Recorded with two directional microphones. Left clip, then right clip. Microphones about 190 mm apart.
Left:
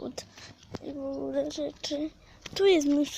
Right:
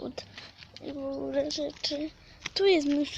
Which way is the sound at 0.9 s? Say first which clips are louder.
Even; 5° left (ahead or behind).